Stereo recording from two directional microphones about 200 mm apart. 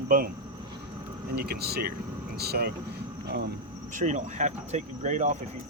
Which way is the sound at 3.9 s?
35° right (ahead or behind).